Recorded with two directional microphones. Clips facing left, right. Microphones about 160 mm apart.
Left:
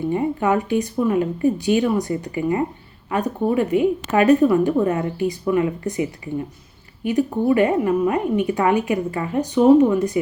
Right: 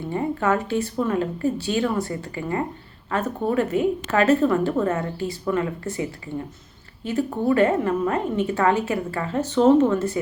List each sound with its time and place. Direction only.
0.1 s a woman's voice: 15° left (ahead or behind)